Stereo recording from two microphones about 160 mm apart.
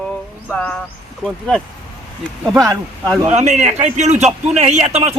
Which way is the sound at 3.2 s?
45° right (ahead or behind).